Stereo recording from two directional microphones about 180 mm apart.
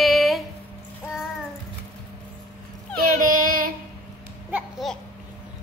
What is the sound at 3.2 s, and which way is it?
Child singing, 50° right (ahead or behind).